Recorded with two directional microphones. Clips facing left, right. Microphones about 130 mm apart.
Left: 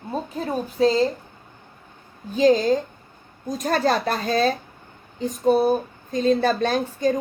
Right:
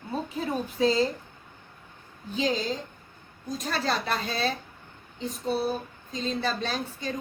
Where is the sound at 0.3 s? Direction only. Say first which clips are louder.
Left 5 dB; 40° left (ahead or behind).